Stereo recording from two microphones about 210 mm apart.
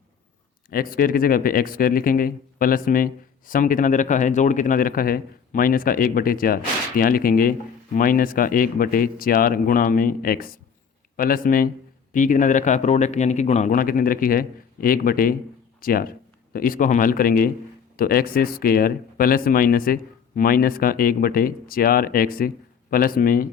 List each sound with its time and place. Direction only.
0.7 s a man's voice: 45° left (ahead or behind)